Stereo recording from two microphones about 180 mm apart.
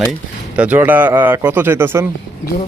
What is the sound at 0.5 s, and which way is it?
Speech, 10° right (ahead or behind).